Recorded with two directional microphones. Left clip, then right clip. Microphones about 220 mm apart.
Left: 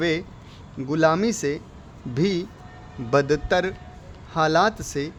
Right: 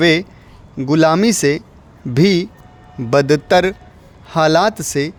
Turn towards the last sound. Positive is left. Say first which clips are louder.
# right 7 dB
turn(degrees=-35)  # may be behind; listen again after turning